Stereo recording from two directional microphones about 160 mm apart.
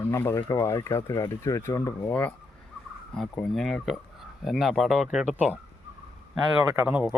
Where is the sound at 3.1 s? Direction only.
5° left (ahead or behind).